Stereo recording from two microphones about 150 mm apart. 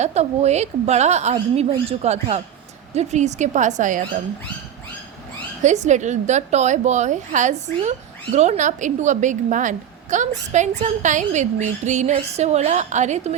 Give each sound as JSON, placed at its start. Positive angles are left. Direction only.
{"t": 0.0, "sound": "a woman's voice", "side_deg": -45}
{"t": 5.6, "sound": "a woman's voice", "side_deg": -50}